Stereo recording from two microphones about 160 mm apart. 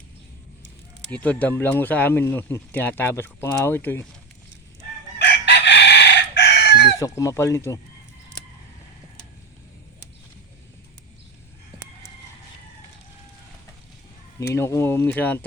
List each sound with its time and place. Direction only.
1.1 s speech: 10° left (ahead or behind)
5.2 s chicken: 90° left
7.0 s speech: 20° left (ahead or behind)
14.3 s speech: 15° left (ahead or behind)